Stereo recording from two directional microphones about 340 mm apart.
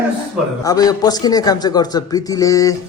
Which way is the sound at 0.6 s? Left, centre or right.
Centre.